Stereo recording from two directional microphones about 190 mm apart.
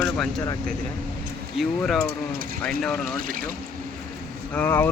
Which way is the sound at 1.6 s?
Centre (ahead or behind).